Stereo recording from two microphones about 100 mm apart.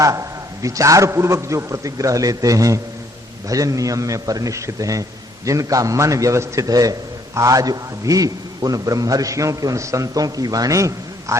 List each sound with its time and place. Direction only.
0.0 s a man's voice: 35° right (ahead or behind)